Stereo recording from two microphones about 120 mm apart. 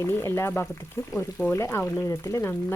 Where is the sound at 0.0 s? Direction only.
20° left (ahead or behind).